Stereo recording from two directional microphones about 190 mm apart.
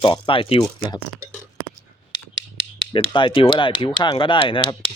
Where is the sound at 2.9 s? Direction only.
25° left (ahead or behind).